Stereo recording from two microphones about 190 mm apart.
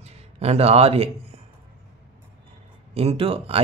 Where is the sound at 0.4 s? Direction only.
35° right (ahead or behind).